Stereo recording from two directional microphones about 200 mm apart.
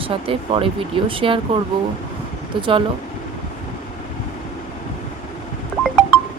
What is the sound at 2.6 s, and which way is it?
Speech, 25° right (ahead or behind).